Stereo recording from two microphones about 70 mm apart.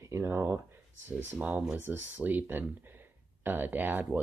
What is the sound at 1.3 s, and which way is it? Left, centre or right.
Speech, right.